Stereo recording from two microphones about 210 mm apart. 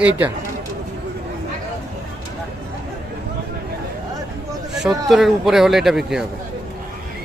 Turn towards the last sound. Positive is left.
turn(degrees=0)  # may be behind; listen again after turning